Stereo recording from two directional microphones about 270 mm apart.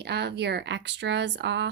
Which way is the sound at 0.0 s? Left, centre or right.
Right.